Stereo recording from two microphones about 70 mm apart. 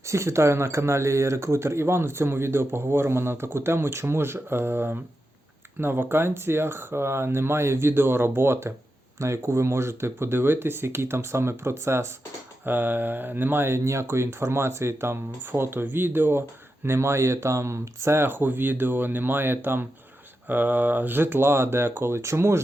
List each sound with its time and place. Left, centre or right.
0.0 s speech: right
12.6 s speech: right